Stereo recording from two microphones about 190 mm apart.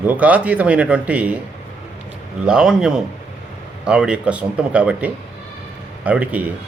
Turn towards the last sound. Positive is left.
turn(degrees=-10)  # may be behind; listen again after turning